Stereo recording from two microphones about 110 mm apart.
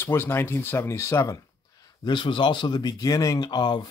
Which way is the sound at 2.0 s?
45° left (ahead or behind).